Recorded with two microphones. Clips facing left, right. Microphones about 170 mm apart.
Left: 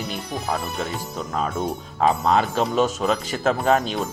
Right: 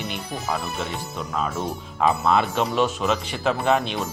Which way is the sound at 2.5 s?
40° left (ahead or behind).